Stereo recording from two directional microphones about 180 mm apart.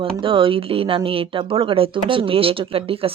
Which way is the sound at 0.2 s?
30° right (ahead or behind).